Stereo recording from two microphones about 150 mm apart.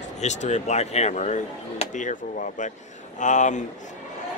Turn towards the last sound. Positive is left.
turn(degrees=55)  # may be behind; listen again after turning